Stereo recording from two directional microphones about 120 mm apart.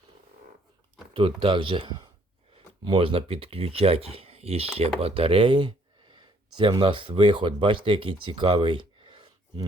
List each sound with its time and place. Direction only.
1.1 s speech: 50° right (ahead or behind)